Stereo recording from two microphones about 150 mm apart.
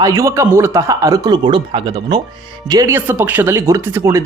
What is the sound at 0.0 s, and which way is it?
Speech, 20° right (ahead or behind).